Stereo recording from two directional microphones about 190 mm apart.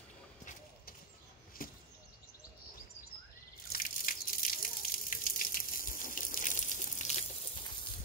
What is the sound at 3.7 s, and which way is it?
Water, 45° left (ahead or behind).